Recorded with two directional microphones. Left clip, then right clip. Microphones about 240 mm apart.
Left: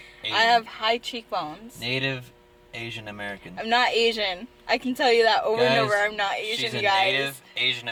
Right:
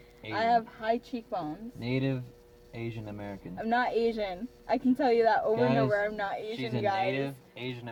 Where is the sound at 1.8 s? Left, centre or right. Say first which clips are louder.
Left 6 dB; centre.